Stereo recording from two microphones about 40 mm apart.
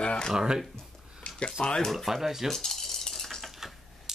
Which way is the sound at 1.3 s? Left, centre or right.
Left.